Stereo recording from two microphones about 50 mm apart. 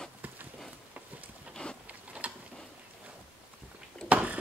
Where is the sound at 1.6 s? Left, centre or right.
Left.